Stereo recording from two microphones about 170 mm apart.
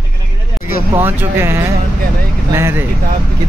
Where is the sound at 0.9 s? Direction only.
15° right (ahead or behind).